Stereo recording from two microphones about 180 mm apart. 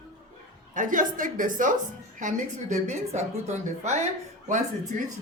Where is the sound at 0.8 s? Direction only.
45° right (ahead or behind).